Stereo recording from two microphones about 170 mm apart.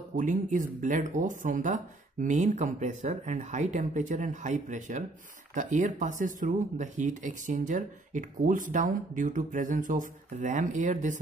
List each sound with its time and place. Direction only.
0.1 s speech: 50° right (ahead or behind)